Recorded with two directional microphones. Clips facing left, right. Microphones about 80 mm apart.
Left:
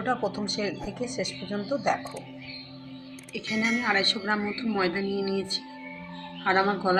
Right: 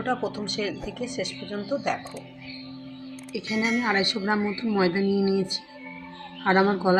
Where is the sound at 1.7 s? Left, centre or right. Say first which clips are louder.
Left 1 dB; centre.